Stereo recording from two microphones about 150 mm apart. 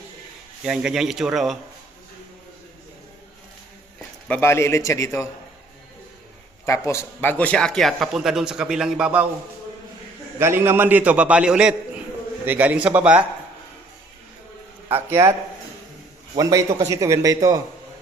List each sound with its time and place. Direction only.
0.6 s speech: 5° right (ahead or behind)
4.3 s a man's voice: 15° left (ahead or behind)
6.7 s speech: 20° left (ahead or behind); by 9.2 s 5° right (ahead or behind)
10.3 s a man's voice: 15° right (ahead or behind)
14.8 s a man's voice: 15° right (ahead or behind)
16.4 s speech: 20° right (ahead or behind)